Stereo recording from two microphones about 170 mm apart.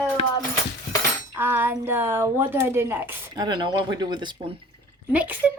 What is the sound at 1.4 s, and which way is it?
Speech, 10° right (ahead or behind).